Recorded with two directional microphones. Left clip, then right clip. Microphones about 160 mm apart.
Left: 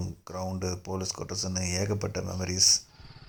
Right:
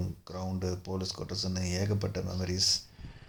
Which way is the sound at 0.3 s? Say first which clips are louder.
Left 3 dB; 25° left (ahead or behind).